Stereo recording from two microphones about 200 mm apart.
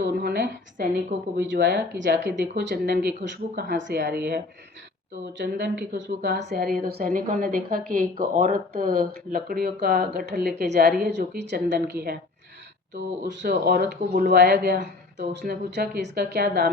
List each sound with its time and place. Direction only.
0.2 s a woman's voice: 55° right (ahead or behind)
5.4 s a woman's voice: 60° right (ahead or behind)
11.1 s a woman's voice: 55° right (ahead or behind)